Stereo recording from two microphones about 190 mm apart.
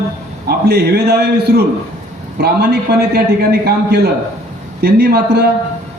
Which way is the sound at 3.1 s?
60° right (ahead or behind).